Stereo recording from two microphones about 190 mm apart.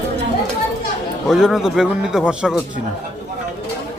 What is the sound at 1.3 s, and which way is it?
A man's voice, centre (ahead or behind).